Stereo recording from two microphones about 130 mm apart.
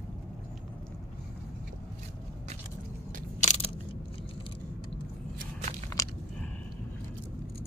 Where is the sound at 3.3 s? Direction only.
60° left (ahead or behind).